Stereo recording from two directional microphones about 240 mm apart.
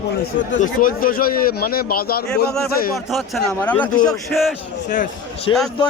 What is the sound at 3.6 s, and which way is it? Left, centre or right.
Speech, centre.